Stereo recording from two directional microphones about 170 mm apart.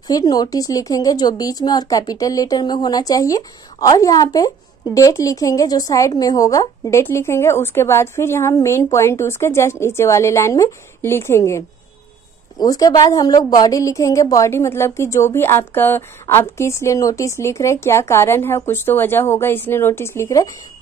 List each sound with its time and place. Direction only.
0.1 s a woman's voice: 20° left (ahead or behind)